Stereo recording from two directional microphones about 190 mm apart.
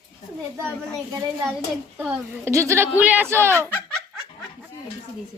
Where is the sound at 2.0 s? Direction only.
15° right (ahead or behind).